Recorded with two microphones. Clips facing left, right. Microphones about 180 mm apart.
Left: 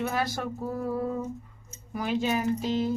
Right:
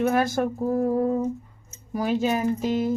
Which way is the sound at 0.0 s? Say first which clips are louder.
Right 8 dB; 50° right (ahead or behind).